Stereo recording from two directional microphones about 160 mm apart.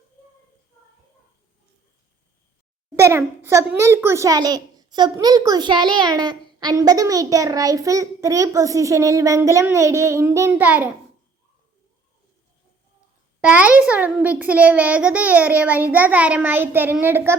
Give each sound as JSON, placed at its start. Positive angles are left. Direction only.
{"t": 2.9, "sound": "a child's voice", "side_deg": -15}
{"t": 13.4, "sound": "a child's voice", "side_deg": -10}